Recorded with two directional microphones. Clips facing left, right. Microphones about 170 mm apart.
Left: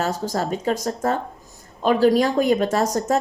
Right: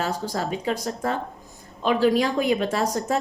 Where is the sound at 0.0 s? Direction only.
45° left (ahead or behind).